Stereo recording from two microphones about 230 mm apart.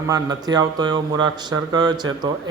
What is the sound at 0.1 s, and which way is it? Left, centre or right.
Speech, centre.